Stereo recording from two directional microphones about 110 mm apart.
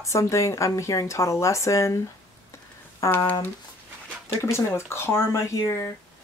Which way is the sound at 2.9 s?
25° left (ahead or behind).